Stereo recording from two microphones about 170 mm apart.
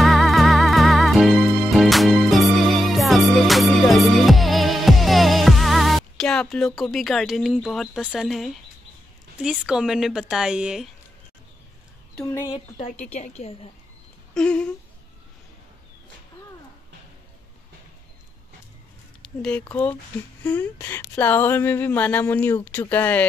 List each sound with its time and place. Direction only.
0.0 s music: centre (ahead or behind)
9.4 s a woman's voice: 5° right (ahead or behind)
12.2 s speech: 15° left (ahead or behind)
13.0 s a woman's voice: 40° left (ahead or behind)
14.3 s a sound: 5° left (ahead or behind)
19.2 s speech: 5° left (ahead or behind)